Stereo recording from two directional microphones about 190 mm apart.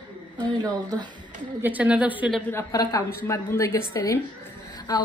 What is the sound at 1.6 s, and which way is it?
Speech, 10° right (ahead or behind).